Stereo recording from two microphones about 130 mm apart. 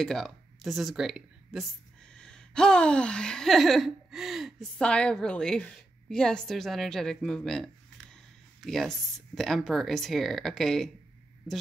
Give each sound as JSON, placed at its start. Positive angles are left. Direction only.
{"t": 0.0, "sound": "speech", "side_deg": 0}
{"t": 2.1, "sound": "a sound", "side_deg": 5}
{"t": 8.5, "sound": "speech", "side_deg": 0}